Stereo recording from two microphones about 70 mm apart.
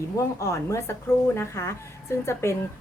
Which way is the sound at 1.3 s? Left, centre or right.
Left.